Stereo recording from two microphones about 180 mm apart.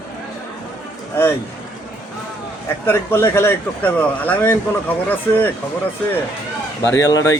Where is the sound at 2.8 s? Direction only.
15° left (ahead or behind).